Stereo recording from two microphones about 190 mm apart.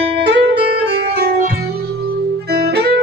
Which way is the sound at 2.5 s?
55° right (ahead or behind).